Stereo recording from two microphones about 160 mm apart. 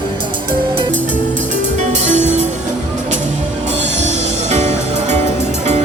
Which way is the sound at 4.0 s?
45° right (ahead or behind).